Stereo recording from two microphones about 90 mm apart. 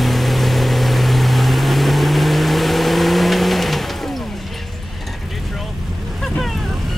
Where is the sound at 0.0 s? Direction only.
Centre (ahead or behind).